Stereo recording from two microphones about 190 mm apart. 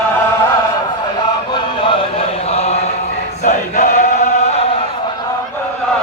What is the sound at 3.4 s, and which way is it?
Chant, 40° left (ahead or behind).